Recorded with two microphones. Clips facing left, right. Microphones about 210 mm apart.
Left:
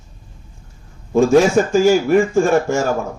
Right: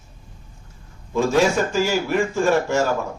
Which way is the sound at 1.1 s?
45° left (ahead or behind).